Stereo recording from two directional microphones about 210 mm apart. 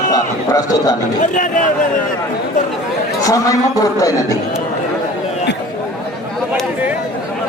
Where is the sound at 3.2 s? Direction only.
15° left (ahead or behind).